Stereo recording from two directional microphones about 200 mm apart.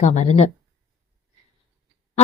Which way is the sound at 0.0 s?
35° left (ahead or behind).